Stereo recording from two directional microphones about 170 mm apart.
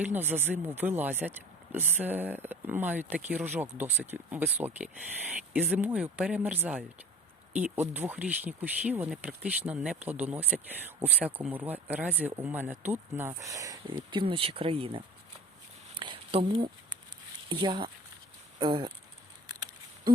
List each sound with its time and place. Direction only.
0.0 s speech: 10° right (ahead or behind); by 15.0 s 35° right (ahead or behind)
16.0 s a sound: 30° right (ahead or behind)
17.5 s speech: 30° right (ahead or behind)